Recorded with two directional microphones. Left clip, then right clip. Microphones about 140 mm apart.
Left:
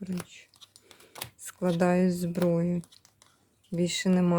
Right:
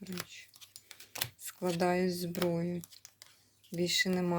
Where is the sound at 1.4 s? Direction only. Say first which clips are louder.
Left 6 dB; 50° left (ahead or behind).